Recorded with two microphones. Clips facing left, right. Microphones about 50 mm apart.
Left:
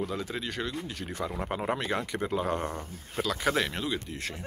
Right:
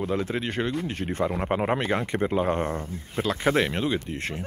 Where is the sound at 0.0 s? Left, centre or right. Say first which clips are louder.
Right 6 dB; right.